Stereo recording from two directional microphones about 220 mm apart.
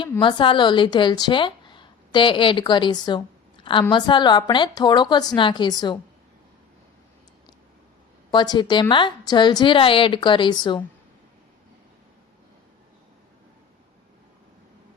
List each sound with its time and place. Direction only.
0.2 s a woman's voice: 20° left (ahead or behind)
8.3 s a woman's voice: 20° left (ahead or behind)